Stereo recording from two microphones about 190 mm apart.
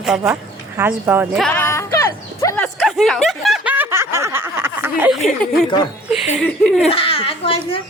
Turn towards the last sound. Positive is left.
turn(degrees=30)  # may be behind; listen again after turning